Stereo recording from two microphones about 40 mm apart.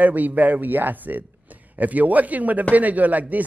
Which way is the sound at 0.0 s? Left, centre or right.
Right.